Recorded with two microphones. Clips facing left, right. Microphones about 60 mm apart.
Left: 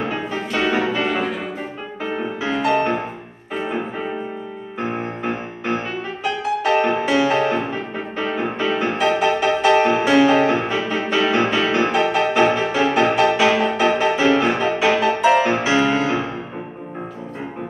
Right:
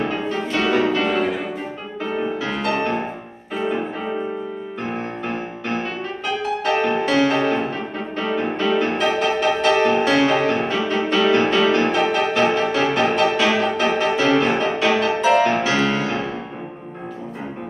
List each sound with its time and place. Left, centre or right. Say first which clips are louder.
0.1 s music: right 1 dB; centre
6.2 s music: left 2 dB; centre
8.9 s music: left 2 dB; centre
11.9 s music: left 1 dB; centre
15.4 s music: left 1 dB; centre